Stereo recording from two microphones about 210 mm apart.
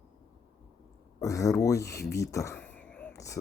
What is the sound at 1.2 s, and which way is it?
Speech, 15° left (ahead or behind).